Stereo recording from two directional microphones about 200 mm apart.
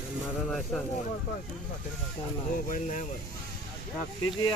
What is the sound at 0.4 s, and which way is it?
Speech, centre (ahead or behind).